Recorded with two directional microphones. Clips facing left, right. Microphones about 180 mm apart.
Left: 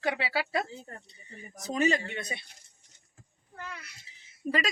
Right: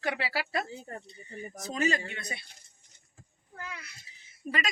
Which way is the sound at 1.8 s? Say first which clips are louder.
Left 3 dB; 20° left (ahead or behind).